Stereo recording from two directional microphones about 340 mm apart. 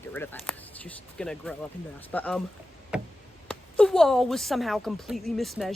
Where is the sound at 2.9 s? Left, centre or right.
Centre.